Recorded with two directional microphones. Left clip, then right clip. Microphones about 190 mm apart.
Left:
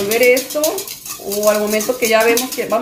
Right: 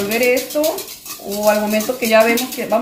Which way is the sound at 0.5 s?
35° left (ahead or behind).